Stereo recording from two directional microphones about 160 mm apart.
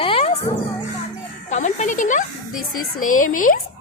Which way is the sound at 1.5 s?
50° left (ahead or behind).